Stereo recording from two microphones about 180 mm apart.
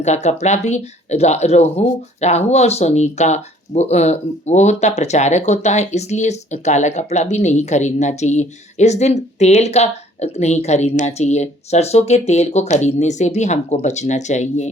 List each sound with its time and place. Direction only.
0.0 s speech: 40° left (ahead or behind)